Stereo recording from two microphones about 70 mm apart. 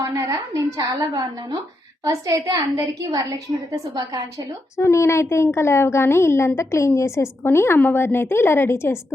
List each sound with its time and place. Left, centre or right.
0.0 s a woman's voice: right
2.0 s a woman's voice: right
4.8 s a woman's voice: left